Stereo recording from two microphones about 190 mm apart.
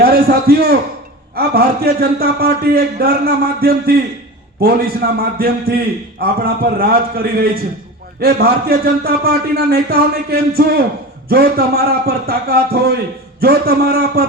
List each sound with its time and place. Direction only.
0.0 s a man's voice: 55° right (ahead or behind)
5.1 s a man's voice: 55° right (ahead or behind)